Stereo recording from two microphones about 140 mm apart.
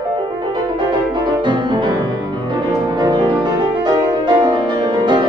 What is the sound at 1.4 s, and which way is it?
Music, 35° right (ahead or behind).